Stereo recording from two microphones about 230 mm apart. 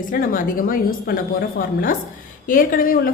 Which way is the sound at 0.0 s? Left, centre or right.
Left.